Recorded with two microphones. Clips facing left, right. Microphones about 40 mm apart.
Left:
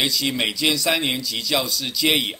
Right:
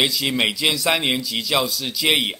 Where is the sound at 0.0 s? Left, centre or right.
Centre.